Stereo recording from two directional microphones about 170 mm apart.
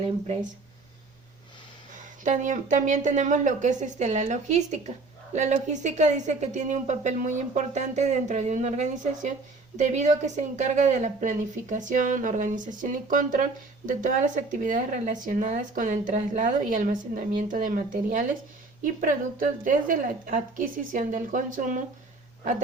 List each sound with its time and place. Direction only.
2.0 s a woman's voice: 45° right (ahead or behind)